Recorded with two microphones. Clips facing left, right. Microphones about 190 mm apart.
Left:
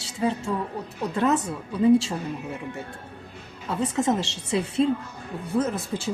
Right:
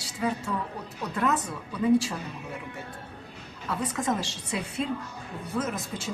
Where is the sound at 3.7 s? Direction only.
25° left (ahead or behind).